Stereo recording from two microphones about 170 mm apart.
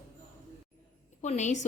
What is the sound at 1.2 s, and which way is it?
Speech, 45° left (ahead or behind).